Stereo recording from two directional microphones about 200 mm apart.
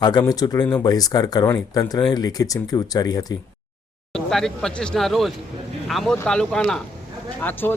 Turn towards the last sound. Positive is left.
turn(degrees=10)  # may be behind; listen again after turning